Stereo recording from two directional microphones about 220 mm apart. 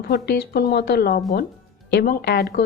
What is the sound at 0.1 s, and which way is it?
Speech, 45° left (ahead or behind).